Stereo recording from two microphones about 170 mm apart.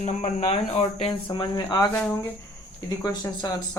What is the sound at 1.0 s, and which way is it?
A man's voice, 30° left (ahead or behind).